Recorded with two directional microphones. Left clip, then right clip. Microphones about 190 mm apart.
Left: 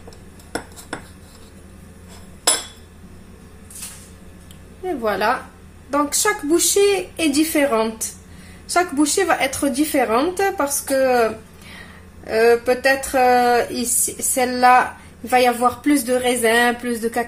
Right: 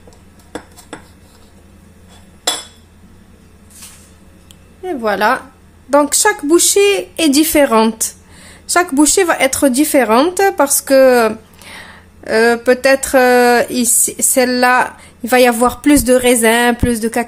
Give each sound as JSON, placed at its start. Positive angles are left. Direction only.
{"t": 4.8, "sound": "a woman's voice", "side_deg": -40}
{"t": 5.9, "sound": "speech", "side_deg": -55}